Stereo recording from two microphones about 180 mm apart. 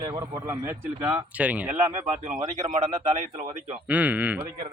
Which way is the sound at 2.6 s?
40° right (ahead or behind).